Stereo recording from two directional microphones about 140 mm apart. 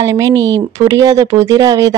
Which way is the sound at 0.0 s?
20° right (ahead or behind).